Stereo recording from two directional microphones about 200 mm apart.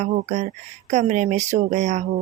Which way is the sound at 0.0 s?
35° right (ahead or behind).